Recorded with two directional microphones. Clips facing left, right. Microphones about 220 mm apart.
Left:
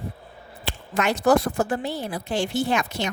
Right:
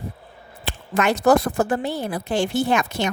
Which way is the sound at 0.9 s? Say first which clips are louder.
Right 2 dB; 50° right (ahead or behind).